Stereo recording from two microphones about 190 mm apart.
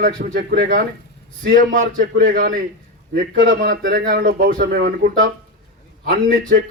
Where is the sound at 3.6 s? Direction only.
55° right (ahead or behind).